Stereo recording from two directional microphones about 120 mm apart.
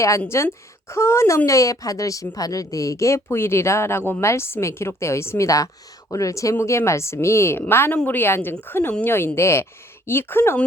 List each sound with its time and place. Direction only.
0.3 s a woman's voice: 20° left (ahead or behind)